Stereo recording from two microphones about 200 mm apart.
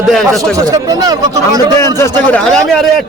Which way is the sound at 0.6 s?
20° right (ahead or behind).